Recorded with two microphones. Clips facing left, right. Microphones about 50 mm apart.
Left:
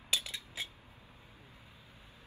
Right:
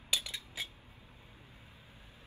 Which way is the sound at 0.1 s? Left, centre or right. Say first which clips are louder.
Even; centre.